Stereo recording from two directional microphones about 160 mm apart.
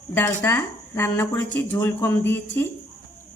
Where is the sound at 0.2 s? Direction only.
10° left (ahead or behind).